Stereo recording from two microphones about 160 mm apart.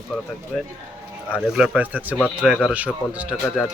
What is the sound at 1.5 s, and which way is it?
Speech, 5° right (ahead or behind).